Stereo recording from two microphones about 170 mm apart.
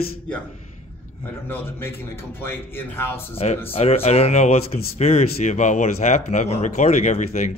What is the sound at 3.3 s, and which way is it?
Speech, 40° left (ahead or behind).